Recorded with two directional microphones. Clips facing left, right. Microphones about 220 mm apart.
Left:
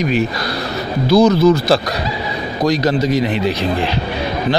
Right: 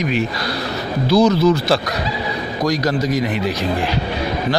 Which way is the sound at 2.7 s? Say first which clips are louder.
Left 3 dB; 25° left (ahead or behind).